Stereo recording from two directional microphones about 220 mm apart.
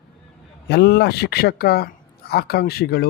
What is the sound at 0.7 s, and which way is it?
Speech, 50° left (ahead or behind).